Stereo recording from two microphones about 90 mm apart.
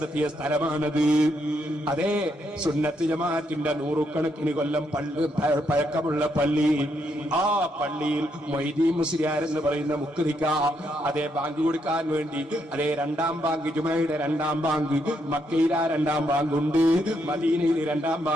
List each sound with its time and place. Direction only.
0.2 s a man's voice: 20° right (ahead or behind)
2.8 s a man's voice: 15° right (ahead or behind)
11.7 s a man's voice: 15° right (ahead or behind)